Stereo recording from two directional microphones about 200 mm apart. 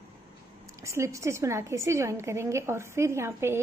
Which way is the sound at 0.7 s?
15° right (ahead or behind).